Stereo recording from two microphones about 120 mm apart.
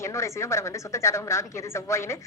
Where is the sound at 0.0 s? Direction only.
25° left (ahead or behind).